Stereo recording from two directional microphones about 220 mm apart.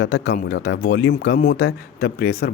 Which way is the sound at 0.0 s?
50° left (ahead or behind).